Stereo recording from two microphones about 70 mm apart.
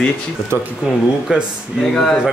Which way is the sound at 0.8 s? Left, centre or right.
Centre.